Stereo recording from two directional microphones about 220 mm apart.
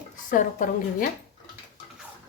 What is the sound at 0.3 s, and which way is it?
Speech, 35° left (ahead or behind).